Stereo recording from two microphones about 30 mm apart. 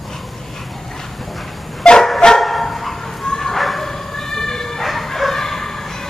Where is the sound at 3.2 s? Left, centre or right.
Centre.